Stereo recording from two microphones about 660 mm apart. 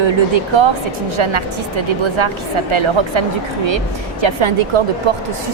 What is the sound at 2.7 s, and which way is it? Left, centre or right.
Speech, right.